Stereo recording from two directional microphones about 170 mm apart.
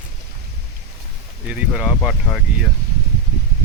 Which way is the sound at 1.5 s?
10° right (ahead or behind).